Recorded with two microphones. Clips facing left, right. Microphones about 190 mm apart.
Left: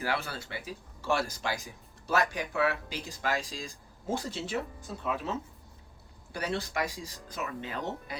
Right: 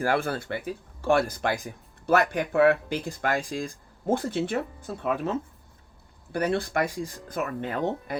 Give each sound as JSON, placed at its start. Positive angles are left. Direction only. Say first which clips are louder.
{"t": 0.0, "sound": "speech", "louder": "right 8 dB", "side_deg": -50}